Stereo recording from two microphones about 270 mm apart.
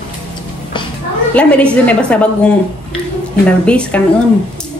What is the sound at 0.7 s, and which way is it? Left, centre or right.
Music, centre.